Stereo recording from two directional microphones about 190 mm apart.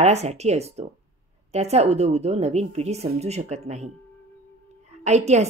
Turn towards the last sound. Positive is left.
turn(degrees=-35)  # may be behind; listen again after turning